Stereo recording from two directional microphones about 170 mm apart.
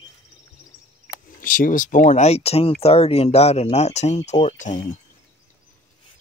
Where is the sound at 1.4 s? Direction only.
55° left (ahead or behind).